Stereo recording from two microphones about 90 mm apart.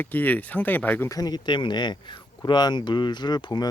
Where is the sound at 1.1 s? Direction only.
45° left (ahead or behind).